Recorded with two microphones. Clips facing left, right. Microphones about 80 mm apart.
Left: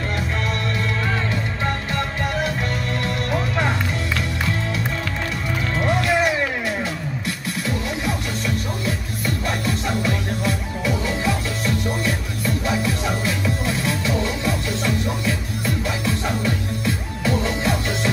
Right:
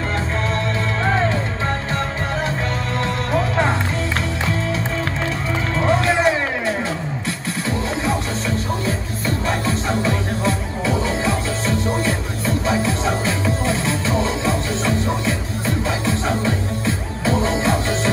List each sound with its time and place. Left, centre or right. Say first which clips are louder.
3.3 s music: right 4 dB; right
5.9 s music: right 3 dB; right